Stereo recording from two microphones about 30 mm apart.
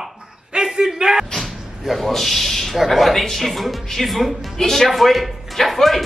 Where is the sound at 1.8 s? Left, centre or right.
Centre.